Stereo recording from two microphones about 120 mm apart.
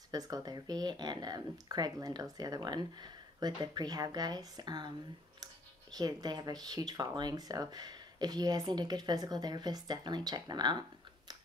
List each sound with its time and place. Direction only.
0.1 s speech: 30° right (ahead or behind)